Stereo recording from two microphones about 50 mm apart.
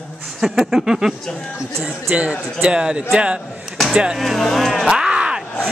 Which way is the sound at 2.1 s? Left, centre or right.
Right.